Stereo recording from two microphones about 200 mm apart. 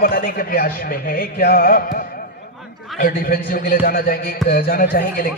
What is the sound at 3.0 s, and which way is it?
Speech, 45° left (ahead or behind).